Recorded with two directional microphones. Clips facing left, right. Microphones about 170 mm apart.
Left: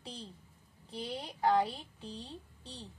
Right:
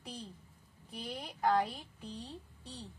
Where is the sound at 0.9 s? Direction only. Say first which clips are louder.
Left 3 dB; 30° left (ahead or behind).